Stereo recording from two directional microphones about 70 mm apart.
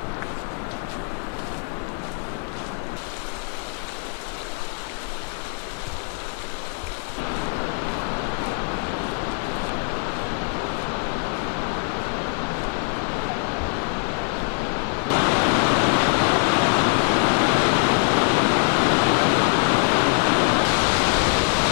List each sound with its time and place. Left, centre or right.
15.0 s pink noise: left